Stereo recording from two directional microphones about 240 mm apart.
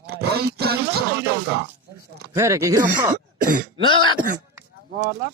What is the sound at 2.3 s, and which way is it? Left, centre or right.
Speech, centre.